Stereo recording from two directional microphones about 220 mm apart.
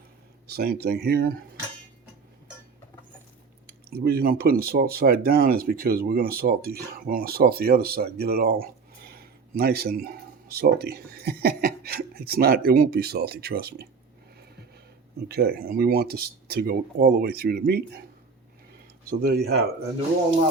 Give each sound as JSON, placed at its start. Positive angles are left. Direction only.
{"t": 0.4, "sound": "speech", "side_deg": -45}
{"t": 3.7, "sound": "speech", "side_deg": -45}
{"t": 15.3, "sound": "speech", "side_deg": -45}
{"t": 19.2, "sound": "speech", "side_deg": -45}